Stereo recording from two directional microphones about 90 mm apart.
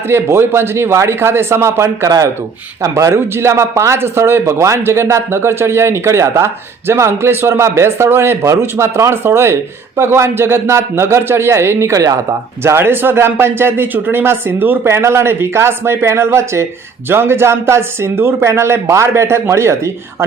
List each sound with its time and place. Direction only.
0.1 s a man's voice: 30° right (ahead or behind)
2.0 s speech: 45° right (ahead or behind)
2.8 s a man's voice: 30° right (ahead or behind)
12.6 s a man's voice: 25° right (ahead or behind)